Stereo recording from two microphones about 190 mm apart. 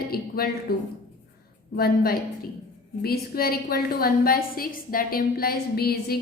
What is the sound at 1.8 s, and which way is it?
A woman's voice, 55° left (ahead or behind).